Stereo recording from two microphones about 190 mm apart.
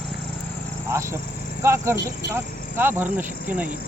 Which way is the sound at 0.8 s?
15° right (ahead or behind).